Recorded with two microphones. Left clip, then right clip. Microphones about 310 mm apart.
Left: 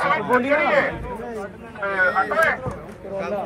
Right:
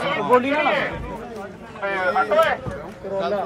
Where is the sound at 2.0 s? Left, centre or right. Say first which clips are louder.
Even; centre.